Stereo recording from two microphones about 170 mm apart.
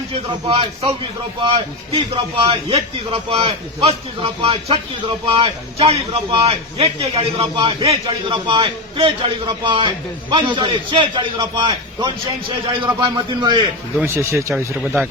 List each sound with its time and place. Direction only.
0.1 s a man's voice: 30° right (ahead or behind)
14.0 s speech: 15° right (ahead or behind)